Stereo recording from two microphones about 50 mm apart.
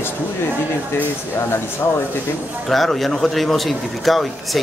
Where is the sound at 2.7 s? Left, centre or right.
Centre.